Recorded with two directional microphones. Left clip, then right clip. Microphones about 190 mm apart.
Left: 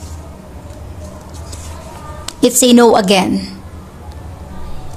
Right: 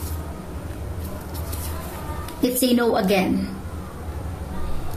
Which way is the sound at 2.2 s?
50° left (ahead or behind).